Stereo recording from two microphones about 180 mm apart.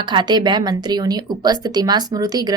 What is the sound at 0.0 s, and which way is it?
Speech, 25° right (ahead or behind).